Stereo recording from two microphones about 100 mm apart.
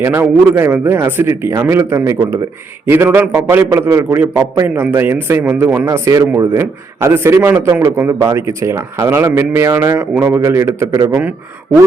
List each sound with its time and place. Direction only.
0.1 s a man's voice: 20° right (ahead or behind)
3.7 s a man's voice: 30° right (ahead or behind)